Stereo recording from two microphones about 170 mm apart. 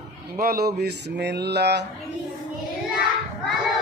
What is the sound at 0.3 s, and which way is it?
A man's voice, 60° right (ahead or behind).